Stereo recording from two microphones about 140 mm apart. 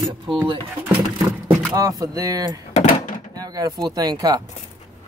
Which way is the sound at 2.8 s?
70° left (ahead or behind).